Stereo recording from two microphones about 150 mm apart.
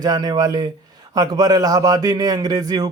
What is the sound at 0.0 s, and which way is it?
Speech, 25° right (ahead or behind).